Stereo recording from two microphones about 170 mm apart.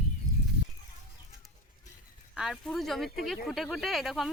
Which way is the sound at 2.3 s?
Centre (ahead or behind).